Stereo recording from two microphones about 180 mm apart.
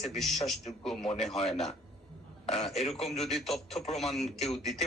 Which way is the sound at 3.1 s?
Centre (ahead or behind).